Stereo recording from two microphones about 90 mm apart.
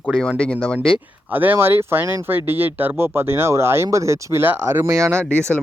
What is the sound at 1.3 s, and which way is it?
Speech, 20° right (ahead or behind).